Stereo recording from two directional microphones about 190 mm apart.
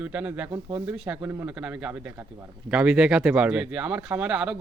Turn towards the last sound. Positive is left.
turn(degrees=-5)  # may be behind; listen again after turning